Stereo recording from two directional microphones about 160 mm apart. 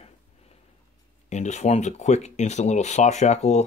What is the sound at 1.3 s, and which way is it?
Speech, 45° left (ahead or behind).